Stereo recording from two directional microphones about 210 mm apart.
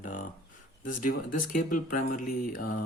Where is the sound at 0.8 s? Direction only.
40° left (ahead or behind).